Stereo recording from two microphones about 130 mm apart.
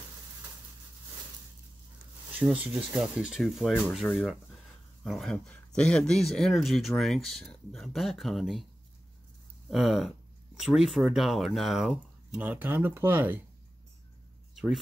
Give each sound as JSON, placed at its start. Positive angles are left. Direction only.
{"t": 2.3, "sound": "speech", "side_deg": -10}
{"t": 9.7, "sound": "speech", "side_deg": 0}
{"t": 12.4, "sound": "speech", "side_deg": -15}
{"t": 14.5, "sound": "a sound", "side_deg": 0}